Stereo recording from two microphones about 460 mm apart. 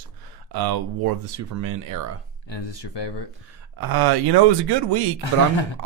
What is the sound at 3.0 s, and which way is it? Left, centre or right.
Speech, left.